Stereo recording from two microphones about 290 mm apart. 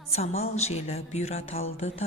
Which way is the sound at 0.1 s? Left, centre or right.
Left.